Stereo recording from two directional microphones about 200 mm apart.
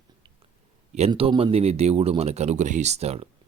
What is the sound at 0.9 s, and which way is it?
A man's voice, 30° right (ahead or behind).